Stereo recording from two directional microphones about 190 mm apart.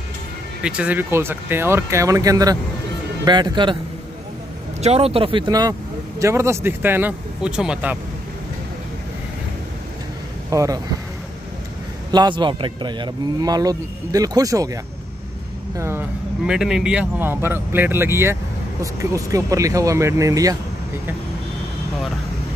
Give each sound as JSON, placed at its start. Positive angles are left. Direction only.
{"t": 0.6, "sound": "a man's voice", "side_deg": -5}
{"t": 4.8, "sound": "speech", "side_deg": -30}
{"t": 10.5, "sound": "speech", "side_deg": -15}
{"t": 12.1, "sound": "a man's voice", "side_deg": -25}
{"t": 16.4, "sound": "speech", "side_deg": -5}